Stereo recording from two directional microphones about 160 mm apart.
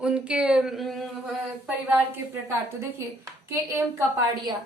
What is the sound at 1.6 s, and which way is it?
A woman's voice, 10° right (ahead or behind).